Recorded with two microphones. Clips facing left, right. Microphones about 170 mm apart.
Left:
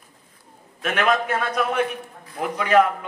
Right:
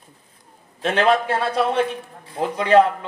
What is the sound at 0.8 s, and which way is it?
A man's voice, 30° right (ahead or behind).